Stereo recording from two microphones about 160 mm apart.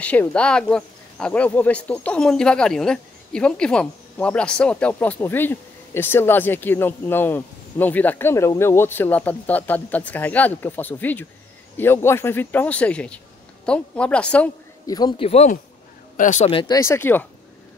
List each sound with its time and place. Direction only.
0.0 s speech: 10° left (ahead or behind)
14.9 s speech: 25° left (ahead or behind)
15.2 s speech: 45° left (ahead or behind)
16.4 s speech: 35° left (ahead or behind)
16.7 s speech: 15° left (ahead or behind)